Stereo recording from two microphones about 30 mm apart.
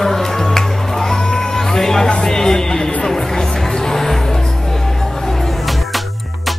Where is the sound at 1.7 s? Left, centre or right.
Centre.